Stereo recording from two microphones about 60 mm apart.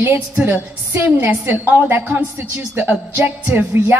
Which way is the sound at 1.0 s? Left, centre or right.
Right.